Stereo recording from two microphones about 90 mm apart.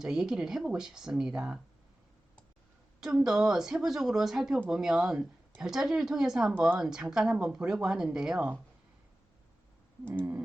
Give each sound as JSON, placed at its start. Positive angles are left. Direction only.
{"t": 0.0, "sound": "speech", "side_deg": -5}
{"t": 3.0, "sound": "speech", "side_deg": -5}
{"t": 10.1, "sound": "a sound", "side_deg": -20}